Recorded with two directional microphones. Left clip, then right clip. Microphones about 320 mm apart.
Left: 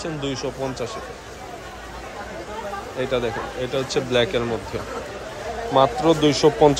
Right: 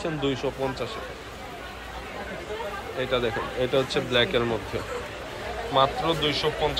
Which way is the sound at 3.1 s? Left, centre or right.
Centre.